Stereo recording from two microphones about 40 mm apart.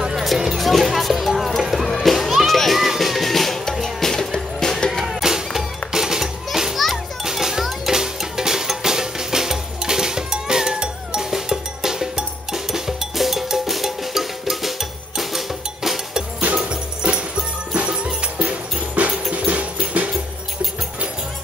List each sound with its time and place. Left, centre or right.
0.6 s music: centre
5.0 s music: centre
16.5 s music: right
17.7 s music: right